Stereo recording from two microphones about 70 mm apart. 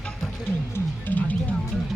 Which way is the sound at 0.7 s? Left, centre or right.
Left.